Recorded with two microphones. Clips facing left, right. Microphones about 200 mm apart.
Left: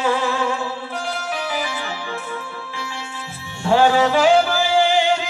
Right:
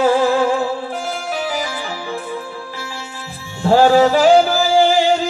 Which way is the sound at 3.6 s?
40° right (ahead or behind).